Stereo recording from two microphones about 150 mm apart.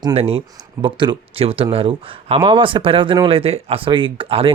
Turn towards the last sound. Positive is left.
turn(degrees=-35)  # may be behind; listen again after turning